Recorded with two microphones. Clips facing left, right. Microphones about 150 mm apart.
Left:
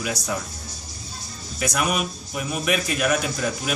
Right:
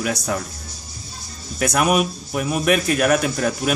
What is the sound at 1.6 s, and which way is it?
A man's voice, 50° right (ahead or behind).